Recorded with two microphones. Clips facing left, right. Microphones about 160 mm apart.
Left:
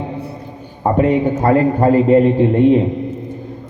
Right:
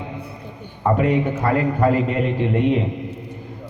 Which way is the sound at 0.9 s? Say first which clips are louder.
Left 8 dB; 35° left (ahead or behind).